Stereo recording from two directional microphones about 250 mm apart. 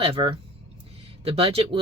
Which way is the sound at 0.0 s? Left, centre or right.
Right.